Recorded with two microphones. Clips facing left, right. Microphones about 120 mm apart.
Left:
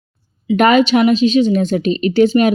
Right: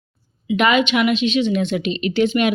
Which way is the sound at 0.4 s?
40° left (ahead or behind).